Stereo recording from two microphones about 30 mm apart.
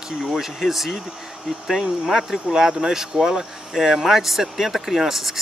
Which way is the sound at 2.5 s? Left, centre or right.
Centre.